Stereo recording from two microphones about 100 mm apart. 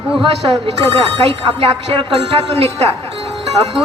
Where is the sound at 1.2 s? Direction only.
75° right (ahead or behind).